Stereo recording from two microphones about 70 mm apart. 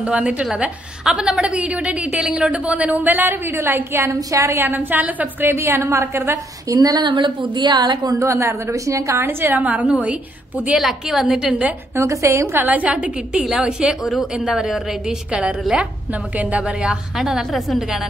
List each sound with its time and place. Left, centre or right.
0.0 s a woman's voice: centre
2.0 s a woman's voice: centre
5.5 s a woman's voice: right
6.7 s speech: right
7.5 s a woman's voice: right
8.1 s a woman's voice: right
10.8 s a woman's voice: centre
11.9 s a woman's voice: right
12.5 s a woman's voice: right
13.4 s a woman's voice: centre